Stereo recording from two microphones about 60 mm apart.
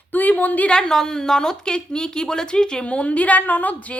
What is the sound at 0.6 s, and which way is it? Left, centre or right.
A woman's voice, centre.